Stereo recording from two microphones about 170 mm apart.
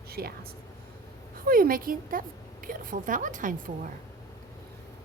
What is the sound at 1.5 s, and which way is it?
A woman's voice, 55° right (ahead or behind).